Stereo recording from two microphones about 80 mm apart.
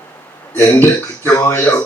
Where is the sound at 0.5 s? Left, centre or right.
Left.